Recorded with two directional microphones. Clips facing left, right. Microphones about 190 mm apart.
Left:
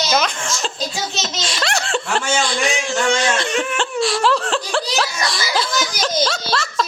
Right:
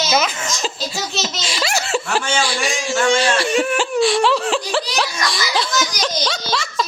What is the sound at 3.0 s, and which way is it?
A woman's voice, 10° right (ahead or behind).